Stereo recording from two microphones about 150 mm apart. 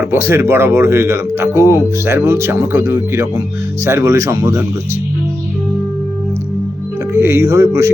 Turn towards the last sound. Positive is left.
turn(degrees=-20)  # may be behind; listen again after turning